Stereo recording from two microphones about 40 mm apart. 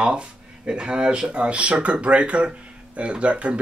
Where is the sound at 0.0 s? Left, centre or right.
Right.